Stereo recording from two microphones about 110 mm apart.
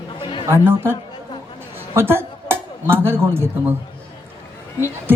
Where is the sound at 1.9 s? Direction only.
20° right (ahead or behind).